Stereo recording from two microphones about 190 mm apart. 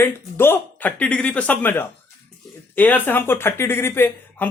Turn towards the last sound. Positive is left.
turn(degrees=10)  # may be behind; listen again after turning